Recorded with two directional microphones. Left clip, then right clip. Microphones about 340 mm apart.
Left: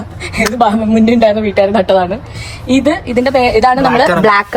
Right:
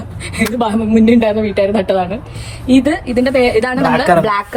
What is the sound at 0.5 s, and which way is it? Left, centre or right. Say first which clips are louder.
A woman's voice: left 3 dB; left.